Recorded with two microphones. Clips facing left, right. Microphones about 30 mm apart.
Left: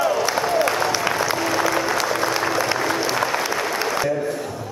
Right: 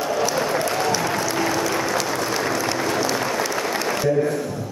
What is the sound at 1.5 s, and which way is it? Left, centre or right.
Applause, left.